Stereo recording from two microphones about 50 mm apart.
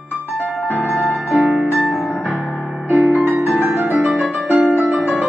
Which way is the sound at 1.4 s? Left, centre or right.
Right.